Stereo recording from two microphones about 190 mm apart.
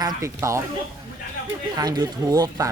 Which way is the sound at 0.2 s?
15° right (ahead or behind).